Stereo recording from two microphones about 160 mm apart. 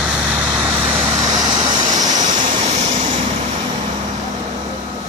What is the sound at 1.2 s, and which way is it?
Vehicle, 25° right (ahead or behind).